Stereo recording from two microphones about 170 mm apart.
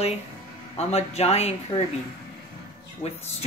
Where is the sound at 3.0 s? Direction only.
40° left (ahead or behind).